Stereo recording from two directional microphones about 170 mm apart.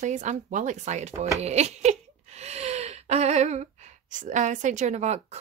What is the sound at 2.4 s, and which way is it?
Gasp, 40° right (ahead or behind).